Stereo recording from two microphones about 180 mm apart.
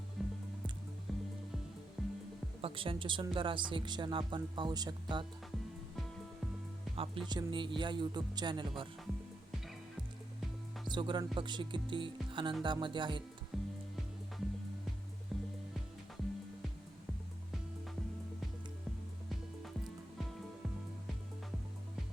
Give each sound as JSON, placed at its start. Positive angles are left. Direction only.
{"t": 0.2, "sound": "music", "side_deg": 0}
{"t": 2.6, "sound": "speech", "side_deg": -30}
{"t": 6.9, "sound": "speech", "side_deg": -30}
{"t": 10.8, "sound": "speech", "side_deg": -25}
{"t": 13.5, "sound": "music", "side_deg": 0}
{"t": 15.3, "sound": "music", "side_deg": 0}